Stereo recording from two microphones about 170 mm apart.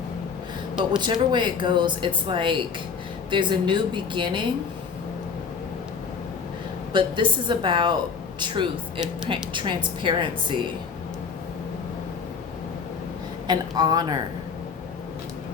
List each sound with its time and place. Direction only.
0.8 s speech: 25° right (ahead or behind)
6.9 s speech: 30° right (ahead or behind)
13.5 s speech: 25° right (ahead or behind)